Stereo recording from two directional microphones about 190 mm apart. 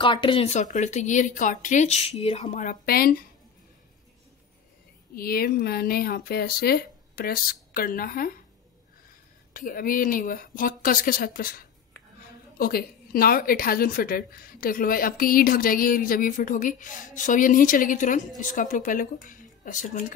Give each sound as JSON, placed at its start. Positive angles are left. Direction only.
{"t": 0.0, "sound": "speech", "side_deg": 25}
{"t": 5.1, "sound": "a woman's voice", "side_deg": 50}
{"t": 9.5, "sound": "a woman's voice", "side_deg": 45}